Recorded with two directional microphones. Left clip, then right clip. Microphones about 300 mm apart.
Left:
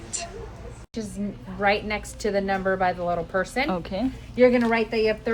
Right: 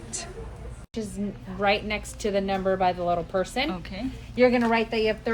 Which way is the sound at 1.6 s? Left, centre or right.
Centre.